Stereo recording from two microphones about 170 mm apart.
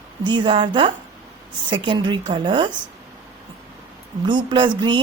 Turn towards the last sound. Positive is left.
turn(degrees=-30)  # may be behind; listen again after turning